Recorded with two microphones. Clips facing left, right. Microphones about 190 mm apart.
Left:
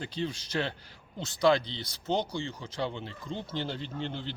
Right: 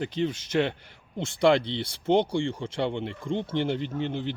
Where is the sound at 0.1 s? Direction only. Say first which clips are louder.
Right 6 dB; 20° right (ahead or behind).